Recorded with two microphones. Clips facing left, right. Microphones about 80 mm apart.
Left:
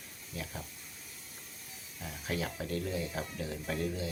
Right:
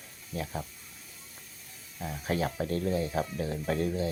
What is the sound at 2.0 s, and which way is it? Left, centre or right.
Speech, right.